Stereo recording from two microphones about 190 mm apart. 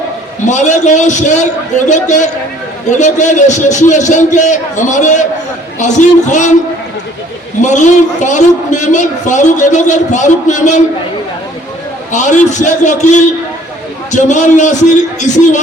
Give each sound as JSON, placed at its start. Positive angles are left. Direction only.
{"t": 0.4, "sound": "a man's voice", "side_deg": 40}
{"t": 7.6, "sound": "a man's voice", "side_deg": 40}
{"t": 12.1, "sound": "a man's voice", "side_deg": 40}